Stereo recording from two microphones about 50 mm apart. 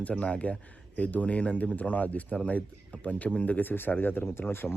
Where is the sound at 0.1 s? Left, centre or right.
Left.